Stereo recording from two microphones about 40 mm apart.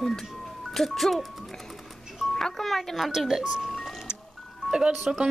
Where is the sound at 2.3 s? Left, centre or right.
Centre.